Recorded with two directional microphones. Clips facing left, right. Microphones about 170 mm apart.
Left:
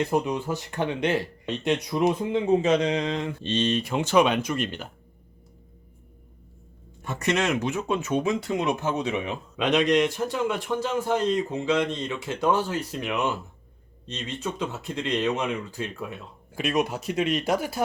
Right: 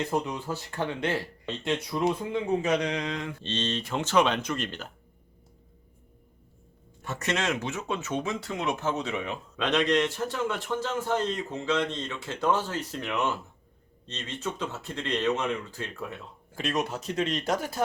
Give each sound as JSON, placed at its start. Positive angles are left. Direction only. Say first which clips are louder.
{"t": 0.1, "sound": "speech", "louder": "left 4 dB", "side_deg": 15}
{"t": 3.4, "sound": "speech", "louder": "left 8 dB", "side_deg": 10}
{"t": 7.0, "sound": "speech", "louder": "left 4 dB", "side_deg": 15}